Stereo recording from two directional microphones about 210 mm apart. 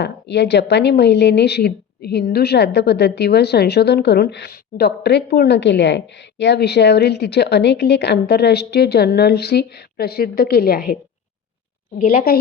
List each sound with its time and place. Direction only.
0.0 s a woman's voice: 55° left (ahead or behind)
11.9 s a woman's voice: 40° left (ahead or behind)